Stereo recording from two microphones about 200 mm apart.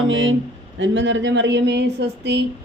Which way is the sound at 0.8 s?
65° right (ahead or behind).